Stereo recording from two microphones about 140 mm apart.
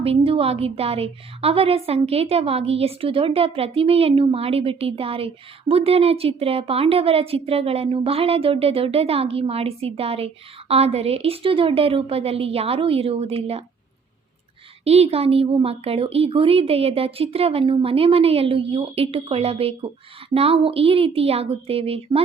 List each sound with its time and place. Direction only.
0.0 s a woman's voice: 45° right (ahead or behind)
14.8 s a woman's voice: 45° right (ahead or behind)